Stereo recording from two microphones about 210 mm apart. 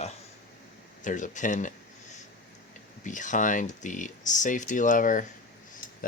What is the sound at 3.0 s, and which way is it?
Speech, 35° left (ahead or behind).